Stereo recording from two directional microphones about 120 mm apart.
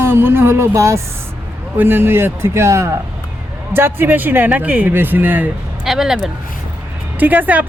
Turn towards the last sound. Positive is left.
turn(degrees=-15)  # may be behind; listen again after turning